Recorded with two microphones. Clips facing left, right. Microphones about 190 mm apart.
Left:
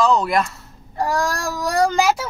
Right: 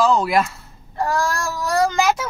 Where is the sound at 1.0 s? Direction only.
15° left (ahead or behind).